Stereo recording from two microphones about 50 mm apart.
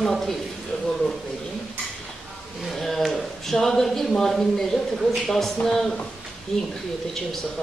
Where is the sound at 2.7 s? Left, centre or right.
Centre.